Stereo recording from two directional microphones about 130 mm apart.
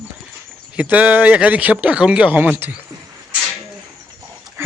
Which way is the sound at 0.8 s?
10° right (ahead or behind).